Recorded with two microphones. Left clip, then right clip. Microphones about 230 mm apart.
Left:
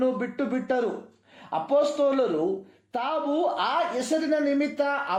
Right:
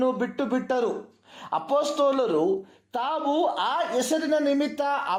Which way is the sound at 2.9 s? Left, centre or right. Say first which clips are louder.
Right 1 dB; right.